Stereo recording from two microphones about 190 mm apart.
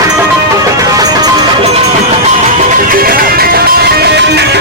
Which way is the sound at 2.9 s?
50° right (ahead or behind).